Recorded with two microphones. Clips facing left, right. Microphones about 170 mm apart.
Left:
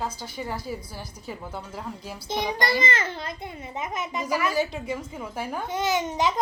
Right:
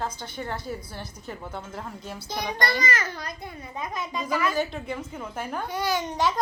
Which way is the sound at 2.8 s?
25° left (ahead or behind).